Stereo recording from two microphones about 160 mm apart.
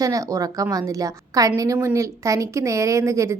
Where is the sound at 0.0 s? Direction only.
20° right (ahead or behind).